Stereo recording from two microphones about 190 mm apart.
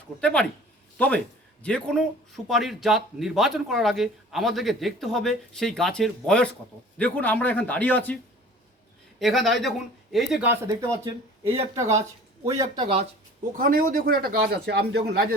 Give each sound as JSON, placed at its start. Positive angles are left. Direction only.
{"t": 0.2, "sound": "speech", "side_deg": 5}
{"t": 13.6, "sound": "a man's voice", "side_deg": -50}